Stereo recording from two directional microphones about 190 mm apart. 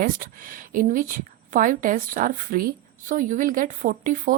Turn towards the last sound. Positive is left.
turn(degrees=-45)  # may be behind; listen again after turning